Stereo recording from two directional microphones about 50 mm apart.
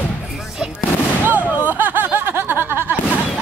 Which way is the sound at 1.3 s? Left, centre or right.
Right.